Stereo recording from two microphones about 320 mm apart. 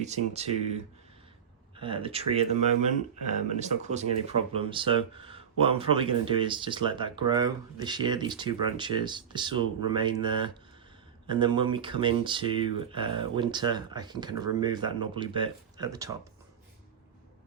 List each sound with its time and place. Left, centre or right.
0.0 s speech: centre